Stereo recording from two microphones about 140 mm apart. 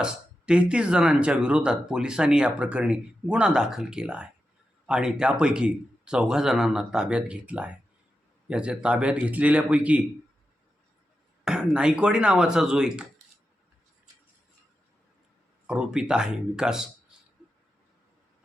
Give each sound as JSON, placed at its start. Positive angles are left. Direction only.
{"t": 0.0, "sound": "speech", "side_deg": -5}
{"t": 11.4, "sound": "speech", "side_deg": -5}
{"t": 15.6, "sound": "speech", "side_deg": -5}